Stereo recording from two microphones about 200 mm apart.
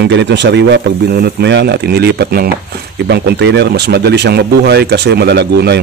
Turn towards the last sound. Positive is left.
turn(degrees=-55)  # may be behind; listen again after turning